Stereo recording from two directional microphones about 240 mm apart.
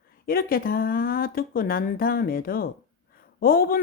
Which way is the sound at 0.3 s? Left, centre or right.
Left.